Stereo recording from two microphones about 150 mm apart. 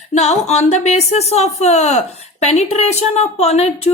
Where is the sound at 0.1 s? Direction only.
45° left (ahead or behind).